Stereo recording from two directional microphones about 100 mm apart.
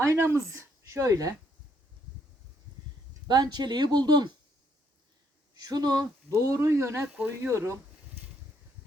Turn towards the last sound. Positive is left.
turn(degrees=-25)  # may be behind; listen again after turning